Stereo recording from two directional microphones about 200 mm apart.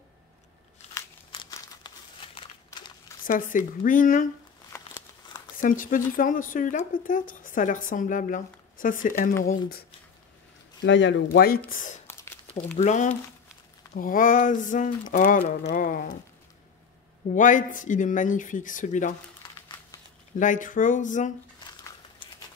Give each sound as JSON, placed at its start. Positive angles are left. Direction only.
{"t": 1.3, "sound": "crumpling", "side_deg": 20}
{"t": 3.3, "sound": "speech", "side_deg": 40}
{"t": 4.7, "sound": "a sound", "side_deg": 15}
{"t": 5.6, "sound": "speech", "side_deg": 40}
{"t": 10.9, "sound": "speech", "side_deg": 65}
{"t": 11.2, "sound": "speech", "side_deg": 50}
{"t": 11.7, "sound": "speech", "side_deg": 40}
{"t": 17.3, "sound": "speech", "side_deg": 40}
{"t": 20.3, "sound": "speech", "side_deg": 40}